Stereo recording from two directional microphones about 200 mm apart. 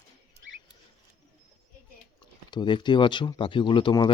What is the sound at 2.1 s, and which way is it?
Speech, 20° left (ahead or behind).